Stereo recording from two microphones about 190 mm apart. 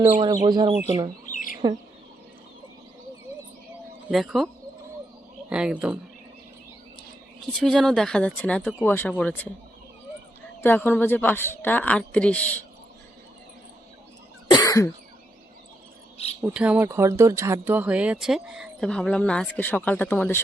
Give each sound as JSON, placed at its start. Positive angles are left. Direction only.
{"t": 0.2, "sound": "speech", "side_deg": -25}
{"t": 1.3, "sound": "chicken", "side_deg": 45}
{"t": 4.1, "sound": "speech", "side_deg": 0}
{"t": 5.5, "sound": "speech", "side_deg": -5}
{"t": 7.6, "sound": "a woman's voice", "side_deg": 0}
{"t": 10.6, "sound": "a woman's voice", "side_deg": 10}
{"t": 14.5, "sound": "cough", "side_deg": 20}
{"t": 16.6, "sound": "speech", "side_deg": -10}